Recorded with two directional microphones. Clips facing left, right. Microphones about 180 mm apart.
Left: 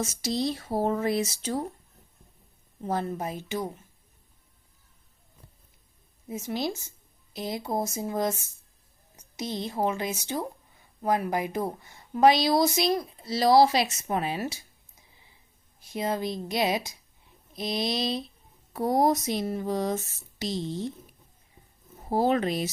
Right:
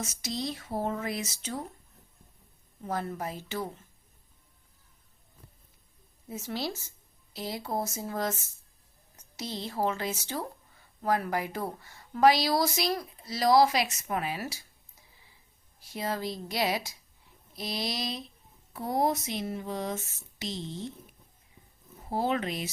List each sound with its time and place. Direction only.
0.0 s speech: 35° left (ahead or behind)
2.8 s speech: 25° left (ahead or behind)
6.2 s a woman's voice: 15° left (ahead or behind)
15.8 s a woman's voice: 20° left (ahead or behind)
18.7 s speech: 40° left (ahead or behind)
22.1 s speech: 40° left (ahead or behind)